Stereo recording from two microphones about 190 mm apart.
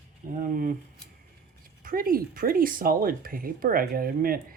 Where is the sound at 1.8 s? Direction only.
50° right (ahead or behind).